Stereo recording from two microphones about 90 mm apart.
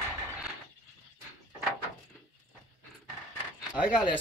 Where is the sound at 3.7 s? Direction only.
15° right (ahead or behind).